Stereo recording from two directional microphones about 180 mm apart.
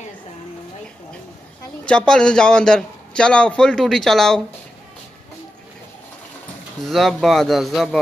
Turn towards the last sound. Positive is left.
turn(degrees=0)  # may be behind; listen again after turning